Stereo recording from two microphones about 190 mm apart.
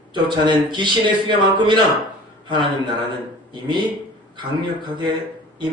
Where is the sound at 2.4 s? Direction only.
25° right (ahead or behind).